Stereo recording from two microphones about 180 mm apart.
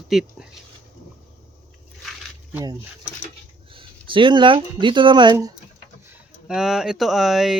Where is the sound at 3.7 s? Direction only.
30° right (ahead or behind).